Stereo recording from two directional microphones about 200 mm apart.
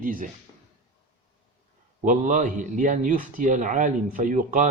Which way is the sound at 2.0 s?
40° right (ahead or behind).